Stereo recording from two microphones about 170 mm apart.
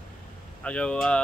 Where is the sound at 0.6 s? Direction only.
5° left (ahead or behind).